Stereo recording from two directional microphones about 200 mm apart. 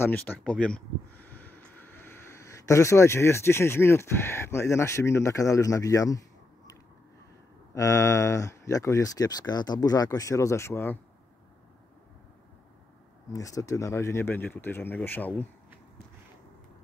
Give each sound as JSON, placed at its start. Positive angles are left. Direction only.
{"t": 0.0, "sound": "speech", "side_deg": 10}
{"t": 7.7, "sound": "speech", "side_deg": 15}
{"t": 13.3, "sound": "speech", "side_deg": 15}